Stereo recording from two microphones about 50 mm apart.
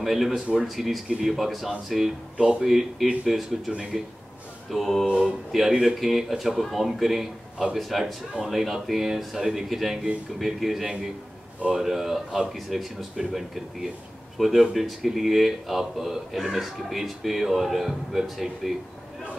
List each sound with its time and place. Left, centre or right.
0.0 s speech: centre
2.3 s speech: centre
2.6 s speech: centre
5.9 s speech: centre
14.4 s speech: centre